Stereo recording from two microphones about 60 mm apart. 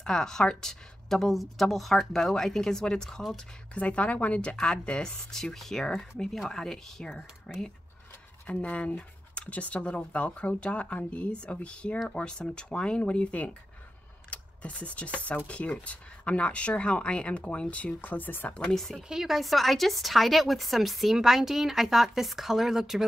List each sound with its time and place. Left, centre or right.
0.0 s a woman's voice: centre
3.7 s a woman's voice: left
8.5 s a woman's voice: left
18.5 s a woman's voice: centre
19.0 s a woman's voice: centre